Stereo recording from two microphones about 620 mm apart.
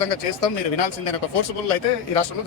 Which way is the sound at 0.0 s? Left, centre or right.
Left.